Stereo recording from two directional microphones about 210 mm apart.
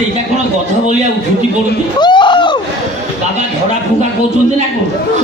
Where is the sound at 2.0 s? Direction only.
20° left (ahead or behind).